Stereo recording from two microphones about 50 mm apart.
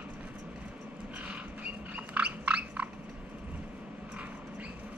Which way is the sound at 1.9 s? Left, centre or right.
Right.